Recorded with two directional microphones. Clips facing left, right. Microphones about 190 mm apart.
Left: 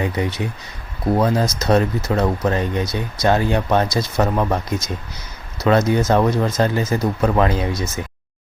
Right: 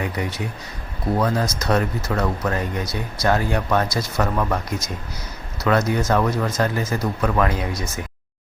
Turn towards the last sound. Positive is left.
turn(degrees=25)  # may be behind; listen again after turning